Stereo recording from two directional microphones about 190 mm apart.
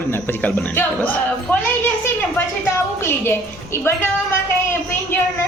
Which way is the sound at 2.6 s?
10° left (ahead or behind).